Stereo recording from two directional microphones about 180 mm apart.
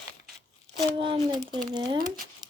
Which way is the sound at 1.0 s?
30° right (ahead or behind).